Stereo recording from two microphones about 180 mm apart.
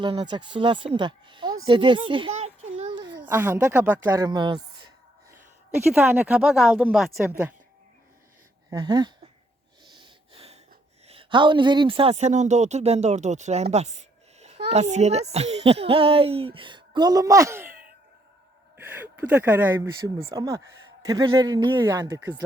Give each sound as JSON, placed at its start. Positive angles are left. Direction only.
{"t": 0.0, "sound": "speech", "side_deg": -25}
{"t": 3.2, "sound": "speech", "side_deg": -10}
{"t": 4.2, "sound": "a man's voice", "side_deg": -25}
{"t": 5.9, "sound": "speech", "side_deg": -10}
{"t": 8.7, "sound": "a man's voice", "side_deg": -20}
{"t": 9.8, "sound": "gasp", "side_deg": -25}
{"t": 11.0, "sound": "a child's voice", "side_deg": -30}
{"t": 18.8, "sound": "a man's voice", "side_deg": -10}